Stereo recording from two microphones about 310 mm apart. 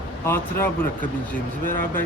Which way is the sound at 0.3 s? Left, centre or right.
Centre.